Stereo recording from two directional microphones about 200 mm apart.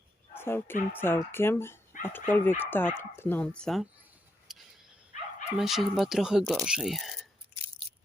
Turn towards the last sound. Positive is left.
turn(degrees=0)  # may be behind; listen again after turning